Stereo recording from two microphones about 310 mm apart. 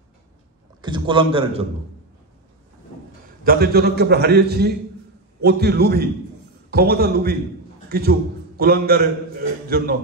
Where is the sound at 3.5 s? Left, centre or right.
Right.